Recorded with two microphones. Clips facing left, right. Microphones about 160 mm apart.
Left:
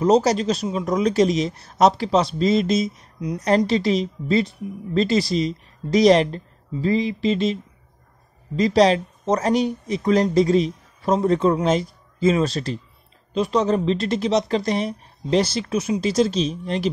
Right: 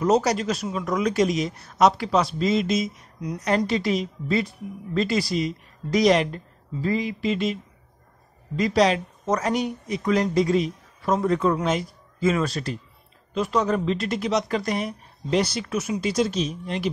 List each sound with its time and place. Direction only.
0.0 s speech: 25° left (ahead or behind)
8.5 s speech: 30° left (ahead or behind)